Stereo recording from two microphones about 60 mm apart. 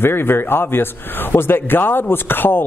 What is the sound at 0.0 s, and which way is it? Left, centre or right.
A man's voice, left.